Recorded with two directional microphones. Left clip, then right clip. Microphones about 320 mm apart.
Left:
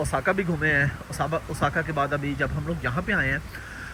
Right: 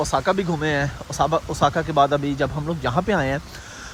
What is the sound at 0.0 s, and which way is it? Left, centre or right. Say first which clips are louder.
Speech: right 4 dB; centre.